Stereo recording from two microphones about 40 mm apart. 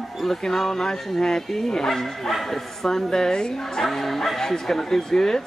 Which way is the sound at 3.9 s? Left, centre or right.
Centre.